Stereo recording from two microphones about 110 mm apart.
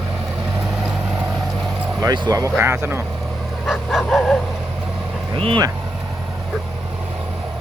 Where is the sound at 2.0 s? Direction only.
40° right (ahead or behind).